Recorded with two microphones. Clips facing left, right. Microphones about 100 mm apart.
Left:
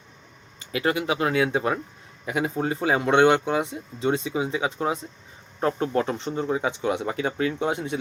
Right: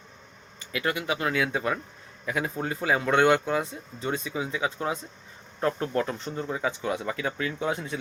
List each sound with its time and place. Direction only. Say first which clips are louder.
0.7 s speech: left 4 dB; 30° left (ahead or behind)